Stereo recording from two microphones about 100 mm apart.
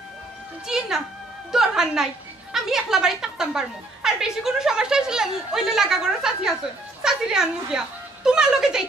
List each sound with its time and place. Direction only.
0.7 s a woman's voice: 5° right (ahead or behind)